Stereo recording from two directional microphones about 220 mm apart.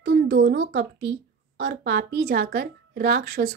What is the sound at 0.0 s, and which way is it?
Speech, 50° right (ahead or behind).